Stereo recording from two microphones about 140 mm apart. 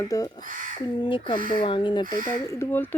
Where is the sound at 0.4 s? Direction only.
75° right (ahead or behind).